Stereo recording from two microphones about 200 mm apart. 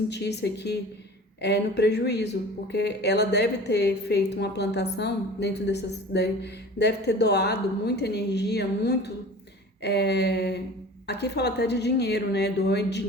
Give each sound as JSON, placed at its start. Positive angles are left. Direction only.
{"t": 0.1, "sound": "a woman's voice", "side_deg": 55}